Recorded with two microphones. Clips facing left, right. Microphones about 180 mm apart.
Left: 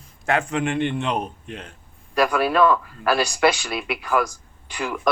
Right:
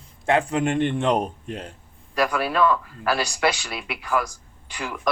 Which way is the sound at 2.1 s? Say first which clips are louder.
Left 3 dB; 55° left (ahead or behind).